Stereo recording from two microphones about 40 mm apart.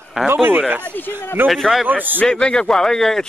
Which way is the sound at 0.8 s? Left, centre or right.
Left.